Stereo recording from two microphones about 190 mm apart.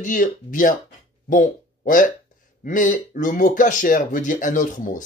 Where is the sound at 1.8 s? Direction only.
45° left (ahead or behind).